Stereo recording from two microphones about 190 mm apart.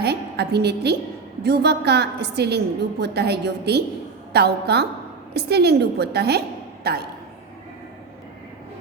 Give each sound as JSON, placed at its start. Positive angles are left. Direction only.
{"t": 0.0, "sound": "a woman's voice", "side_deg": -60}